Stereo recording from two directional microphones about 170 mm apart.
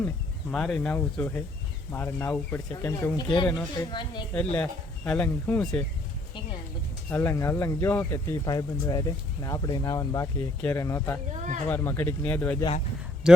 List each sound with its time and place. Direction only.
0.5 s speech: 5° left (ahead or behind); by 4.2 s 25° left (ahead or behind)
4.5 s speech: 5° left (ahead or behind)
7.1 s speech: 15° left (ahead or behind)
11.3 s speech: 40° right (ahead or behind)
11.7 s speech: 10° left (ahead or behind)
13.2 s speech: 5° right (ahead or behind)